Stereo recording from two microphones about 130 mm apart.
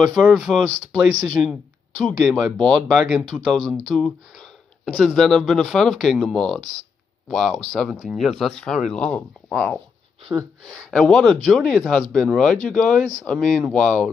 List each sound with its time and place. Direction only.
0.0 s speech: centre (ahead or behind)
9.5 s speech: 5° right (ahead or behind)
10.8 s speech: 5° left (ahead or behind)